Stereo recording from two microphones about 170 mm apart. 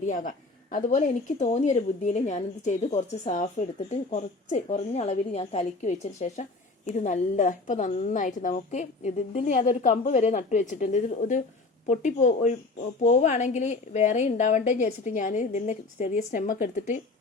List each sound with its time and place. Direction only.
0.0 s a woman's voice: 50° left (ahead or behind)